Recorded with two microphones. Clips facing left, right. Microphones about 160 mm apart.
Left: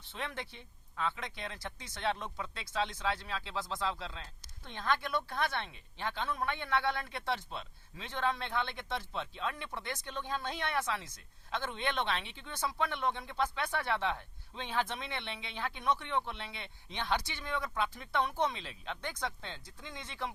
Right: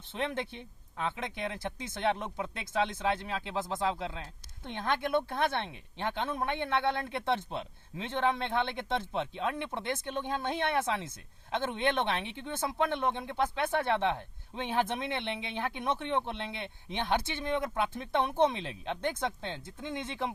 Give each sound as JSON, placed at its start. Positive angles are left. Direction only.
{"t": 0.1, "sound": "speech", "side_deg": -20}